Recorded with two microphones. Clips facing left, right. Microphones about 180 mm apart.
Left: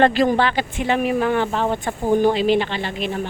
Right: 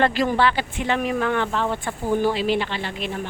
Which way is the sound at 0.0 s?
25° left (ahead or behind).